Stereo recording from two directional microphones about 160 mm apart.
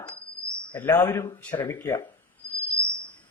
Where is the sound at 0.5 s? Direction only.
10° left (ahead or behind).